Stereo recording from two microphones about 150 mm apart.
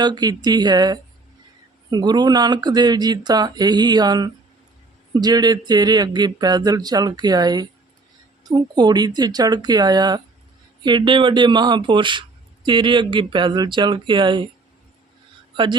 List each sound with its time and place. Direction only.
0.0 s speech: 25° right (ahead or behind)
15.5 s speech: 30° right (ahead or behind)